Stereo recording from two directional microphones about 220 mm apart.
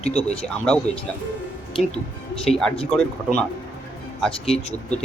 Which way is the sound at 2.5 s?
Centre (ahead or behind).